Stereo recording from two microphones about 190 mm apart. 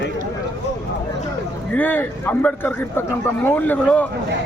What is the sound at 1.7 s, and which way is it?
A man's voice, 10° left (ahead or behind).